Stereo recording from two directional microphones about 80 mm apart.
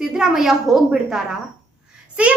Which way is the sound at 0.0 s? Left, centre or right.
Centre.